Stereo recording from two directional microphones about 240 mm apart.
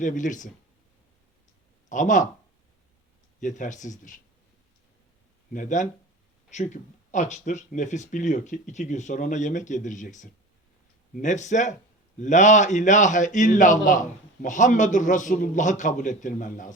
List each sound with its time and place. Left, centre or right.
0.0 s speech: left
1.9 s speech: left
3.4 s speech: left
5.5 s speech: left